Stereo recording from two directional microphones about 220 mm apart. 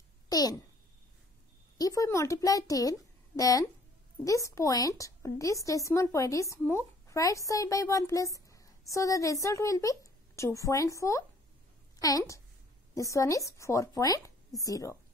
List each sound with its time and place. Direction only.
0.3 s a child's voice: 15° left (ahead or behind)
1.8 s a woman's voice: 15° left (ahead or behind)